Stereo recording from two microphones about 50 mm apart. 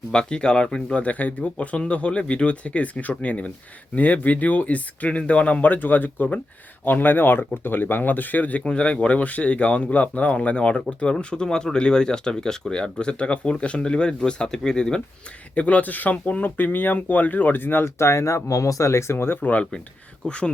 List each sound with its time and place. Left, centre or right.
0.1 s speech: centre
1.0 s speech: left
8.6 s speech: left
15.5 s speech: left
17.9 s speech: left
19.1 s speech: left
19.4 s speech: left